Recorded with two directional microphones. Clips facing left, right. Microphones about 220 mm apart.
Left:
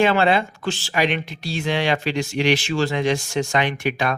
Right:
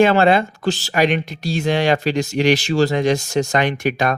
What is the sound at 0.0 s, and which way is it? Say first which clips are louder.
Speech: right 4 dB; 45° right (ahead or behind).